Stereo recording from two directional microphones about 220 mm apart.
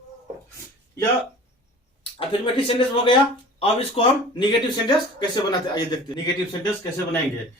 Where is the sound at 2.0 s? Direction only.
25° left (ahead or behind).